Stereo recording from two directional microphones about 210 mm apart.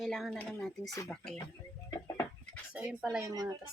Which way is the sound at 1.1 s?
5° left (ahead or behind).